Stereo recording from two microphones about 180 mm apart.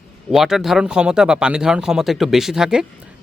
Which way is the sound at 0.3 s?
Centre (ahead or behind).